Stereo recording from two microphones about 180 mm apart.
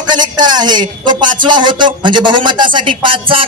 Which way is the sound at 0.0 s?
25° right (ahead or behind).